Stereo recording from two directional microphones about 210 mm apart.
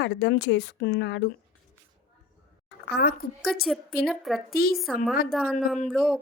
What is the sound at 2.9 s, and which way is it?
Speech, 50° left (ahead or behind).